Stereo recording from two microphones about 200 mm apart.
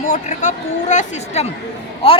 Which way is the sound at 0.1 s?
35° left (ahead or behind).